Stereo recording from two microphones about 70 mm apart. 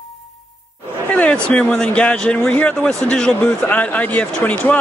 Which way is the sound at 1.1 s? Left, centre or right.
Centre.